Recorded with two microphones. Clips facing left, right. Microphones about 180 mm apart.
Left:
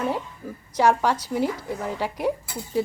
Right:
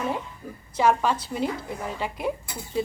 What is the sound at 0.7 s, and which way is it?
A woman's voice, 10° left (ahead or behind).